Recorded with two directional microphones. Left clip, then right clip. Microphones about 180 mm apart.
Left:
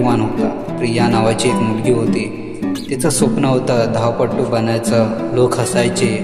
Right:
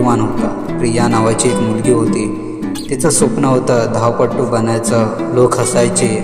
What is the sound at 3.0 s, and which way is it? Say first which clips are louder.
A man's voice: right 3 dB; 5° right (ahead or behind).